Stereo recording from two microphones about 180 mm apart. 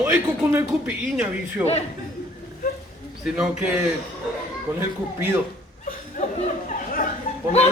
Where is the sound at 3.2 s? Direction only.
5° right (ahead or behind).